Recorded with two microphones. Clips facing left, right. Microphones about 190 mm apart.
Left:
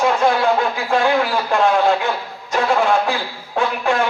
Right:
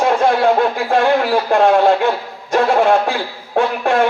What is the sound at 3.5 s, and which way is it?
Speech, 55° right (ahead or behind).